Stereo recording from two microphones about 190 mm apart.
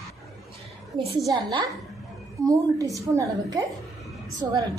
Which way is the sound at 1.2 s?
25° right (ahead or behind).